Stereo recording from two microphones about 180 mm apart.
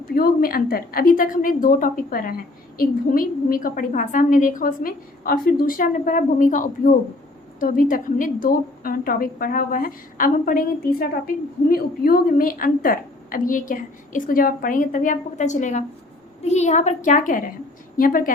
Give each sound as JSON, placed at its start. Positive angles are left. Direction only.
{"t": 0.1, "sound": "a woman's voice", "side_deg": 55}